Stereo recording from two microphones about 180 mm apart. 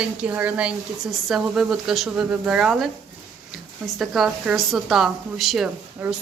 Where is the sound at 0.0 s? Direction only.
5° right (ahead or behind).